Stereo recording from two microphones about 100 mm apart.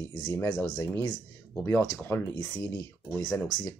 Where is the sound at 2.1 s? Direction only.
25° left (ahead or behind).